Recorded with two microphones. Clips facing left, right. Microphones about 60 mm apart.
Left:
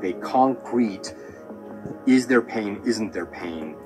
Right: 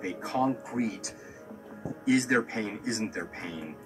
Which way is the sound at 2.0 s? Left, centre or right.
Left.